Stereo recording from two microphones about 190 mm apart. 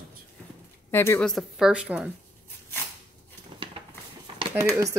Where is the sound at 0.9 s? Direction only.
10° left (ahead or behind).